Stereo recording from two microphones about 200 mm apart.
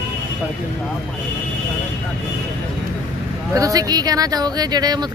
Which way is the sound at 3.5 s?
15° right (ahead or behind).